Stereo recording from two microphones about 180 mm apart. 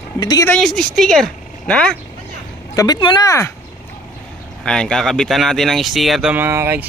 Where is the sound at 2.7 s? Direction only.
20° left (ahead or behind).